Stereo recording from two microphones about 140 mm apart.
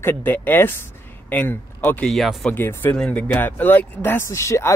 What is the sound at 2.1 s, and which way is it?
Speech, centre (ahead or behind).